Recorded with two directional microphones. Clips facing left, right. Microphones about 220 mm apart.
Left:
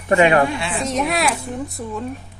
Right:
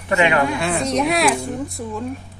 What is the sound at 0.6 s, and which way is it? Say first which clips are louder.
Speech: right 3 dB; 45° right (ahead or behind).